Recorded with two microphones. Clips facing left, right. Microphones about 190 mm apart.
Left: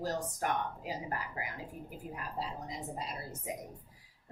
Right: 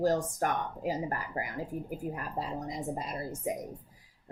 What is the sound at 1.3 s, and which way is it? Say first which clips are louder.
Speech: right 6 dB; 50° right (ahead or behind).